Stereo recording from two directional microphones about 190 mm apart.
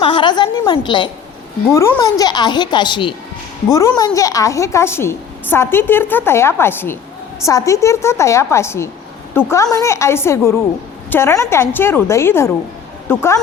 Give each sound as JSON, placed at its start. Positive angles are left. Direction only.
{"t": 0.0, "sound": "a woman's voice", "side_deg": 25}